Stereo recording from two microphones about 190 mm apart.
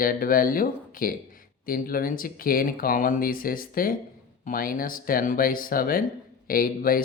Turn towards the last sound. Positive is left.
turn(degrees=50)  # may be behind; listen again after turning